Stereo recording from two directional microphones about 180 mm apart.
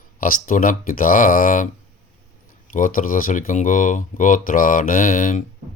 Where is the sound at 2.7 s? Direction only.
45° left (ahead or behind).